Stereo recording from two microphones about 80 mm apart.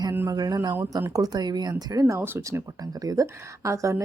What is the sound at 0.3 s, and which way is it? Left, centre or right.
Speech, right.